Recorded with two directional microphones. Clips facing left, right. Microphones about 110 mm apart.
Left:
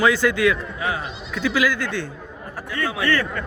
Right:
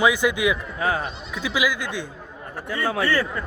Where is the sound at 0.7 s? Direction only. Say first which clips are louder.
Right 2 dB; 40° right (ahead or behind).